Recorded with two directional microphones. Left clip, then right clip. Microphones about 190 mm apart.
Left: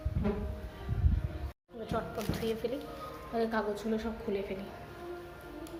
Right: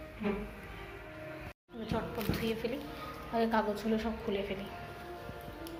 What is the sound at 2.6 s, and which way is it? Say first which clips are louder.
Speech: left 2 dB; 10° left (ahead or behind).